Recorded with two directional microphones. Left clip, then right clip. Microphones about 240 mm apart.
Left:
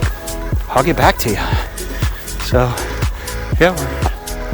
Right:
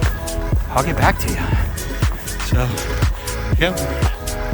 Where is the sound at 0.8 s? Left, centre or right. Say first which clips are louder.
Left 5 dB; left.